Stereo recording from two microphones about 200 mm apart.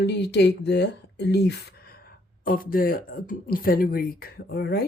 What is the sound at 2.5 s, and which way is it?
Speech, 45° left (ahead or behind).